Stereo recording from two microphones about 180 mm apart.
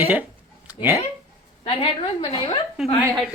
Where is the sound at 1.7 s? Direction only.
30° left (ahead or behind).